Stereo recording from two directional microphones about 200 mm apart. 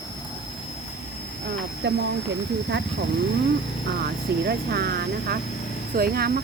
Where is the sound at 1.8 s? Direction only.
55° right (ahead or behind).